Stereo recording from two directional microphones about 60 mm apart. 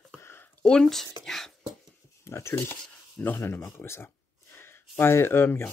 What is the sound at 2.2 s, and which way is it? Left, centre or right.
Speech, left.